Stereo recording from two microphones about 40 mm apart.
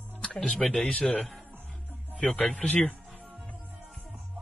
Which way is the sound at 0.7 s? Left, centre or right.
Left.